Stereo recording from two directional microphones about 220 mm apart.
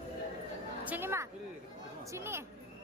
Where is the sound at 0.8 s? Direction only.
10° right (ahead or behind).